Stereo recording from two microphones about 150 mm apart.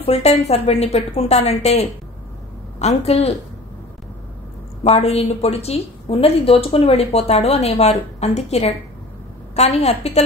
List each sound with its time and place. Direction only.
0.0 s a woman's voice: 45° left (ahead or behind)
4.8 s a woman's voice: 45° left (ahead or behind)